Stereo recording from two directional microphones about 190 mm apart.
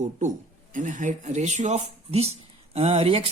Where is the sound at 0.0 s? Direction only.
40° right (ahead or behind).